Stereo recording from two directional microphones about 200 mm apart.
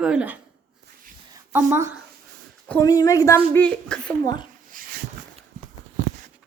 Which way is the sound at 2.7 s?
15° left (ahead or behind).